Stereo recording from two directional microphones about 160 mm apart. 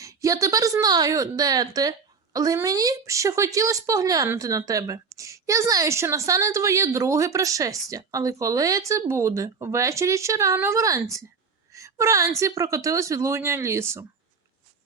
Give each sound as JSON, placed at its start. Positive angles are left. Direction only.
{"t": 0.0, "sound": "a woman's voice", "side_deg": -20}
{"t": 11.7, "sound": "a sound", "side_deg": -20}
{"t": 12.4, "sound": "a woman's voice", "side_deg": -20}